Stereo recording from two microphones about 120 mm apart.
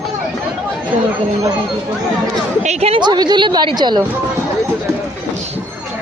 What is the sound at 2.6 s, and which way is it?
Speech, 65° right (ahead or behind).